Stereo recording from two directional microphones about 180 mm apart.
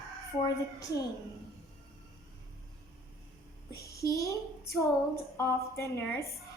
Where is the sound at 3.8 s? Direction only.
15° left (ahead or behind).